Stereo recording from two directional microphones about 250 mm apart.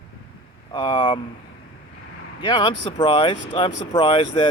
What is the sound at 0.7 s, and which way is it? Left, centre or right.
Speech, centre.